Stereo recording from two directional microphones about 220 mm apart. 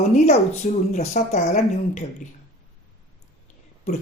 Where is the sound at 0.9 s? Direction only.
30° left (ahead or behind).